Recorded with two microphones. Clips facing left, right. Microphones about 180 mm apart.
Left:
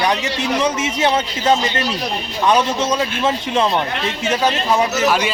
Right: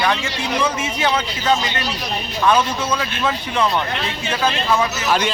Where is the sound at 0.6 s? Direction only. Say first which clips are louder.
Left 2 dB; 25° left (ahead or behind).